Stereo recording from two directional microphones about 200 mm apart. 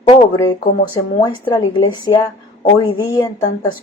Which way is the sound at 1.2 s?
20° left (ahead or behind).